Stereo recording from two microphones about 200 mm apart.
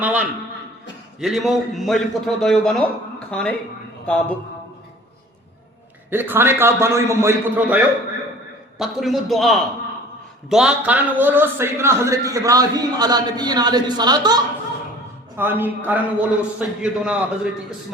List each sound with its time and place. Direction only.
0.0 s a man's voice: 5° right (ahead or behind)
6.1 s a man's voice: 10° right (ahead or behind)
15.4 s a man's voice: 10° right (ahead or behind)